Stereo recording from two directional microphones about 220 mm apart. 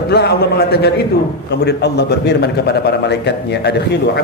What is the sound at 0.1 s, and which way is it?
A man's voice, 45° left (ahead or behind).